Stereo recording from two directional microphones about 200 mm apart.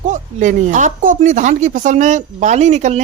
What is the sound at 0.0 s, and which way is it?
Speech, 40° right (ahead or behind).